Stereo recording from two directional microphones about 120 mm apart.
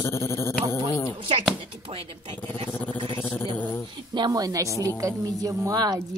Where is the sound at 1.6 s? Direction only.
45° right (ahead or behind).